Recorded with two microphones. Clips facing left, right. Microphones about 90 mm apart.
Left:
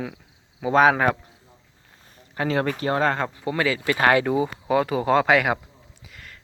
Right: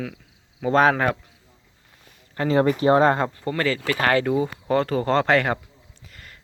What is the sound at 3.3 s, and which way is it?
Speech, 10° left (ahead or behind).